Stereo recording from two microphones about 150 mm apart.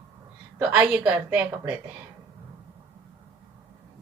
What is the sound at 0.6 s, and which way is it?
A woman's voice, 10° right (ahead or behind).